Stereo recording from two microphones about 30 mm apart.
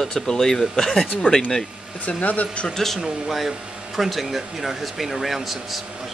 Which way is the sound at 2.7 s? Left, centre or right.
Centre.